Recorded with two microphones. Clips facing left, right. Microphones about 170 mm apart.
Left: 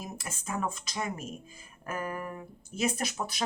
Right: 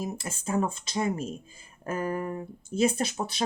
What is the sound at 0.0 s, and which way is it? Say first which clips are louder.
Speech: right 7 dB; 30° right (ahead or behind).